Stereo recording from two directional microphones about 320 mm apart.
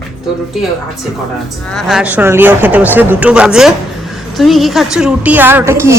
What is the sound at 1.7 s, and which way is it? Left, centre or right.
Speech, centre.